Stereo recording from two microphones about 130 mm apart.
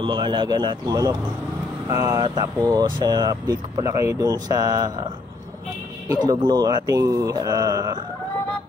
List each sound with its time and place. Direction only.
0.0 s speech: 35° right (ahead or behind)
2.2 s speech: 35° right (ahead or behind)
6.0 s speech: 30° right (ahead or behind)